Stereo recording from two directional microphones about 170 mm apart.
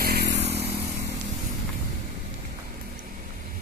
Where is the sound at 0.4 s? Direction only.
40° right (ahead or behind).